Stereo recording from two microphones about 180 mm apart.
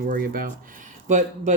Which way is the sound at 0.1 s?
50° right (ahead or behind).